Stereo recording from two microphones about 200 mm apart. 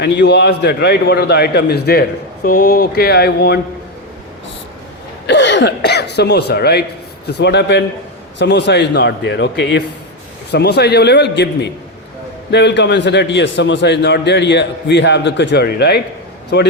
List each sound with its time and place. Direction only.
0.0 s a man's voice: 55° left (ahead or behind)
5.2 s a man's voice: 60° left (ahead or behind)